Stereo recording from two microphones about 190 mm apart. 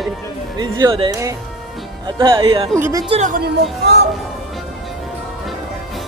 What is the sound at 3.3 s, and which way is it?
Speech, 60° right (ahead or behind).